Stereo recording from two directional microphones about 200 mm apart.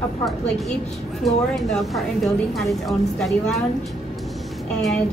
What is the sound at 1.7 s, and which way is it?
A woman's voice, centre (ahead or behind).